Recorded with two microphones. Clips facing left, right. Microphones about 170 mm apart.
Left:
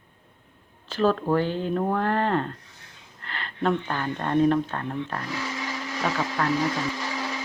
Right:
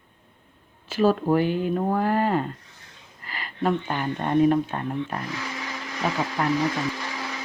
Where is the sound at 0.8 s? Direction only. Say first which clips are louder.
Right 2 dB; 10° right (ahead or behind).